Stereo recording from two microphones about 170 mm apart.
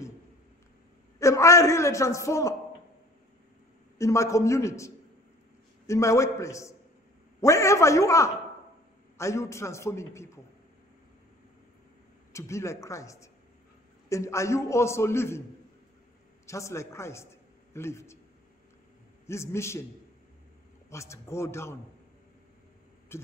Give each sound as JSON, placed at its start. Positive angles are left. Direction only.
{"t": 1.2, "sound": "a man's voice", "side_deg": 20}
{"t": 4.0, "sound": "a man's voice", "side_deg": 15}
{"t": 12.3, "sound": "a man's voice", "side_deg": 15}
{"t": 16.4, "sound": "a man's voice", "side_deg": 15}
{"t": 19.2, "sound": "a man's voice", "side_deg": 15}
{"t": 20.9, "sound": "a man's voice", "side_deg": 15}
{"t": 23.1, "sound": "a sound", "side_deg": 15}